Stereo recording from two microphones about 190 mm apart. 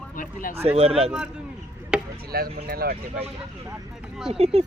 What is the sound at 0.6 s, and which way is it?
Speech, 30° right (ahead or behind).